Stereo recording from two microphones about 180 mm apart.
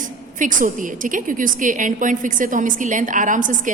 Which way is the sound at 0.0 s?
45° right (ahead or behind).